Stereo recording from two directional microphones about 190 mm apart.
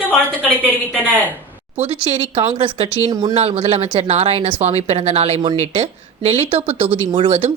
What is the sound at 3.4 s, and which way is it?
Speech, 35° right (ahead or behind).